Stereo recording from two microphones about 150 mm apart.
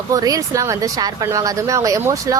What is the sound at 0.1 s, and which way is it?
Speech, 25° right (ahead or behind).